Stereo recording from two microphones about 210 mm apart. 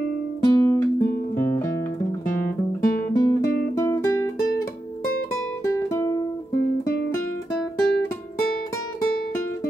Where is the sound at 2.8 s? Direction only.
15° left (ahead or behind).